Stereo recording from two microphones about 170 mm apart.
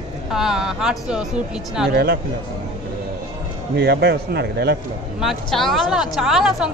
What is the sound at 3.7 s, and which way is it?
A man's voice, 75° right (ahead or behind).